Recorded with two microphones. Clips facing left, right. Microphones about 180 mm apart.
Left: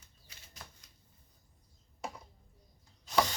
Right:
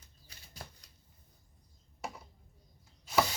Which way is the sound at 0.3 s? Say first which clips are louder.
Right 4 dB; 35° right (ahead or behind).